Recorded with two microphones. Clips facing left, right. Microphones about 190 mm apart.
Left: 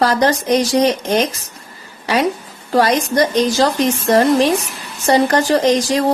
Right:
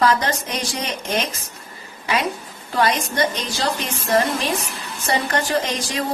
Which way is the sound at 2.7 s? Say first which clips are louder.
Left 6 dB; 40° left (ahead or behind).